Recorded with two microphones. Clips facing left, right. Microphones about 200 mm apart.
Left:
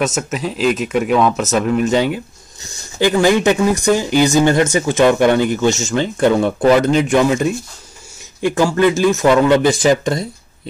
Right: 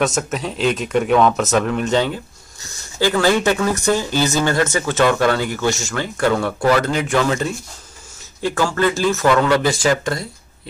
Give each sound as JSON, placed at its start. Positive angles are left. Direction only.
{"t": 0.0, "sound": "speech", "side_deg": 5}